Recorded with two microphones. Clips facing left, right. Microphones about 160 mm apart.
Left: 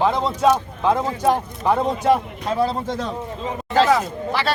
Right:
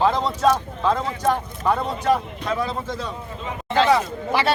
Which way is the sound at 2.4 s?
30° left (ahead or behind).